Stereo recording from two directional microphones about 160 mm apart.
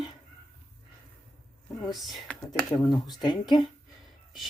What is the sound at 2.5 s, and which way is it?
Speech, 20° left (ahead or behind).